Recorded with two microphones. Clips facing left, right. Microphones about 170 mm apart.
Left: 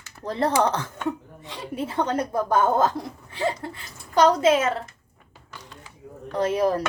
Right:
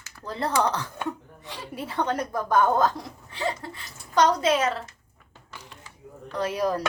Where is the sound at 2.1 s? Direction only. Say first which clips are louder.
Left 3 dB; 25° left (ahead or behind).